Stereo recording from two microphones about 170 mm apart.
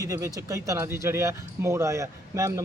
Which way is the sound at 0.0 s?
20° right (ahead or behind).